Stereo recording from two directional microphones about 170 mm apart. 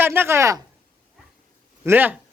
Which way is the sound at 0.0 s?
10° right (ahead or behind).